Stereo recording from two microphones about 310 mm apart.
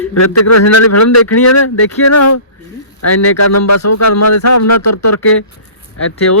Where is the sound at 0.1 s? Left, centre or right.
Left.